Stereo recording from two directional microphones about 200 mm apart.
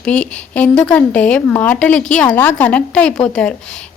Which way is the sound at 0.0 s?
5° left (ahead or behind).